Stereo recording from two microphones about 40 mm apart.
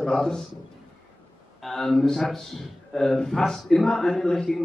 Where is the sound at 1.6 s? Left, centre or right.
Centre.